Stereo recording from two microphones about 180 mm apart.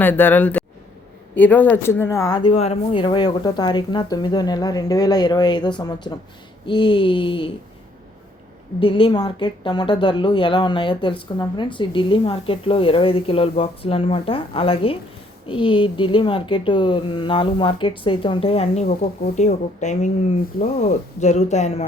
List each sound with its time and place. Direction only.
0.0 s a woman's voice: 10° left (ahead or behind); by 7.5 s 30° left (ahead or behind)
8.8 s a woman's voice: 30° left (ahead or behind)
21.2 s speech: 40° left (ahead or behind)